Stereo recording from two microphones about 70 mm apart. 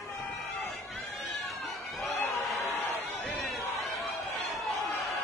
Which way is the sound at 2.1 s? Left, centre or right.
Left.